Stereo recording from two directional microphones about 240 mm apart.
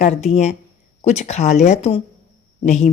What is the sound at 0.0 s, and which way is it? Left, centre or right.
A woman's voice, left.